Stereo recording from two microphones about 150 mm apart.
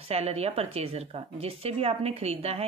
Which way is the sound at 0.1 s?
45° right (ahead or behind).